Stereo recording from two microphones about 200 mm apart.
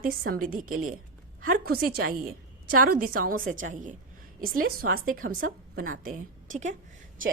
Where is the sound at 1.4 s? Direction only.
45° right (ahead or behind).